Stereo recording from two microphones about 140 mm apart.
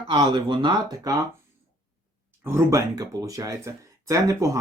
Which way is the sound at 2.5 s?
20° right (ahead or behind).